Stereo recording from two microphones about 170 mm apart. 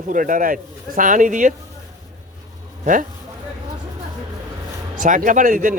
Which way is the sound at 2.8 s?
50° right (ahead or behind).